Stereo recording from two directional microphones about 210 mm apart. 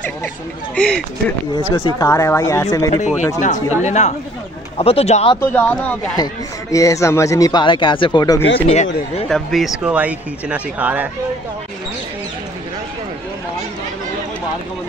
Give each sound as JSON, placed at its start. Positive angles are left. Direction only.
{"t": 0.7, "sound": "speech", "side_deg": 5}
{"t": 1.5, "sound": "speech", "side_deg": 20}
{"t": 3.0, "sound": "speech", "side_deg": 35}
{"t": 5.4, "sound": "speech", "side_deg": 10}
{"t": 9.3, "sound": "speech", "side_deg": 0}